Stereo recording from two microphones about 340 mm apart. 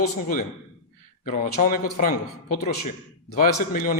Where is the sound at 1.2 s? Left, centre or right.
Left.